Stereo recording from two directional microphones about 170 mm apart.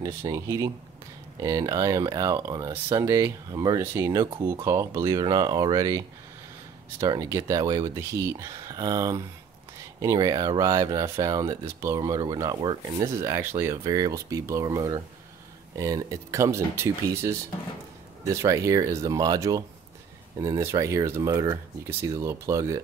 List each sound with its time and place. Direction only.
0.0 s speech: 20° right (ahead or behind)